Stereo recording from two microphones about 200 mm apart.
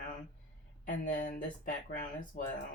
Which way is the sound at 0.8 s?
40° left (ahead or behind).